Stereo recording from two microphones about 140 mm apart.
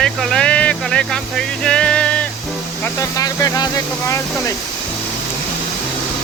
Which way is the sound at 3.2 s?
25° left (ahead or behind).